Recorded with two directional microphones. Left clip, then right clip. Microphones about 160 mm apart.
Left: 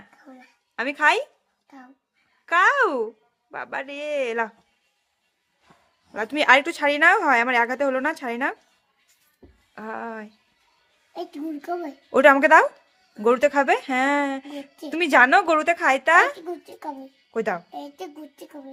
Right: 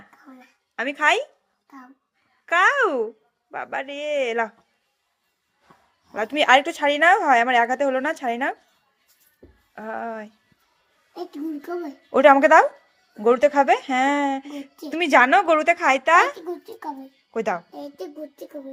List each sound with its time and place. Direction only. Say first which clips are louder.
0.1 s a sound: even; 10° left (ahead or behind)
2.5 s speech: even; 10° left (ahead or behind)
6.4 s speech: right 1 dB; 15° left (ahead or behind)
9.7 s a child's voice: right 2 dB; 15° left (ahead or behind)
12.4 s a child's voice: right 1 dB; 15° left (ahead or behind)
14.2 s a sound: right 2 dB; 30° left (ahead or behind)
14.4 s a child's voice: even; 20° left (ahead or behind)
17.7 s a child's voice: even; 30° left (ahead or behind)